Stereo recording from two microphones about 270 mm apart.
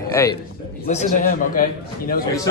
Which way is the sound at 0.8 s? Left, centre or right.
Left.